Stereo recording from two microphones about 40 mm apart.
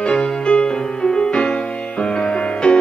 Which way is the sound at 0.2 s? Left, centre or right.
Left.